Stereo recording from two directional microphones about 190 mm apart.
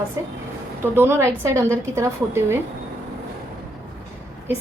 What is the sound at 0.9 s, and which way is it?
A woman's voice, 10° right (ahead or behind).